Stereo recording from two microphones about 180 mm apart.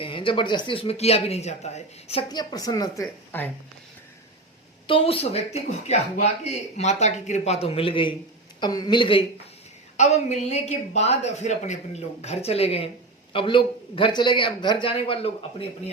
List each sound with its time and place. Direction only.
0.0 s speech: 30° left (ahead or behind)
2.3 s a man's voice: 20° left (ahead or behind)
4.9 s a man's voice: 30° left (ahead or behind)
10.0 s a man's voice: 40° left (ahead or behind)